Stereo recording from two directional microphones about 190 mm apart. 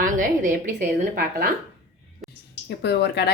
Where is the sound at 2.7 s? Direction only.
65° left (ahead or behind).